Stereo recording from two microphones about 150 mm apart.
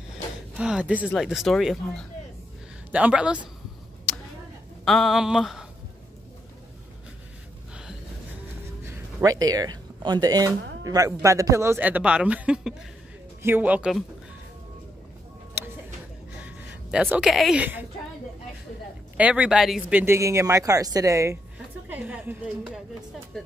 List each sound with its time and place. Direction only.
0.6 s a woman's voice: 5° right (ahead or behind)
4.8 s speech: centre (ahead or behind)
8.8 s a woman's voice: 20° right (ahead or behind)
16.4 s speech: 10° right (ahead or behind)
19.1 s a woman's voice: 10° right (ahead or behind)